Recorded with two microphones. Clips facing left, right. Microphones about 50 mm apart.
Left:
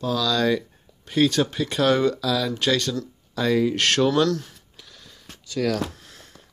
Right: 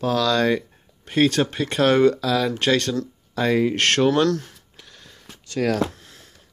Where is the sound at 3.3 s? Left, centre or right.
Right.